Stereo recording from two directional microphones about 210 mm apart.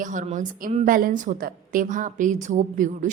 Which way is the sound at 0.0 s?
35° right (ahead or behind).